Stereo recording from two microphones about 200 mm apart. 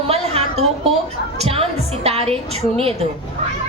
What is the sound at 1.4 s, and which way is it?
Speech, 30° right (ahead or behind).